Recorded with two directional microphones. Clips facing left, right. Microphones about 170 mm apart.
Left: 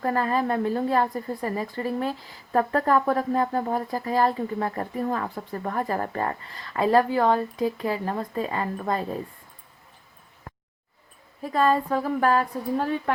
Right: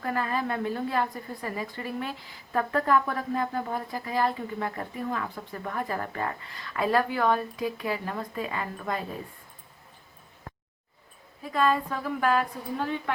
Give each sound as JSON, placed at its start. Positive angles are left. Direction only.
{"t": 0.0, "sound": "a woman's voice", "side_deg": 35}
{"t": 11.5, "sound": "a woman's voice", "side_deg": 35}